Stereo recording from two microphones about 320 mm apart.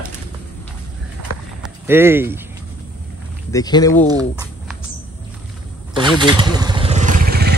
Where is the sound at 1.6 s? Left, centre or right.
Centre.